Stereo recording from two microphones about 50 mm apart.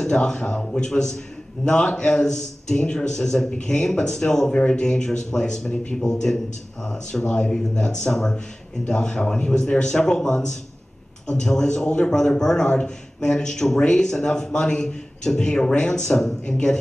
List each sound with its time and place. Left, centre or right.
0.0 s a man's voice: centre